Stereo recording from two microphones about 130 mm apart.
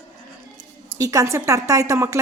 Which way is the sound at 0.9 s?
25° right (ahead or behind).